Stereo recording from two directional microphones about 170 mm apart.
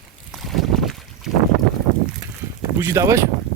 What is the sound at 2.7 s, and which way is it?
Speech, 15° right (ahead or behind).